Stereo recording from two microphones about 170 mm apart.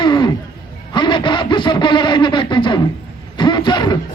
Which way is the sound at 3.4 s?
25° left (ahead or behind).